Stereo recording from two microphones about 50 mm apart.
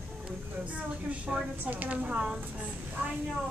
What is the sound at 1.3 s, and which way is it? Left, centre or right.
Speech, centre.